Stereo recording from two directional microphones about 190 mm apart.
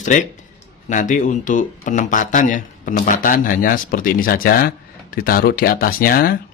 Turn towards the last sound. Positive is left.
turn(degrees=50)  # may be behind; listen again after turning